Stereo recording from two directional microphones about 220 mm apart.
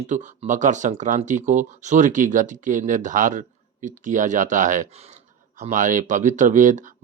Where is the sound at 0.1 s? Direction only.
35° right (ahead or behind).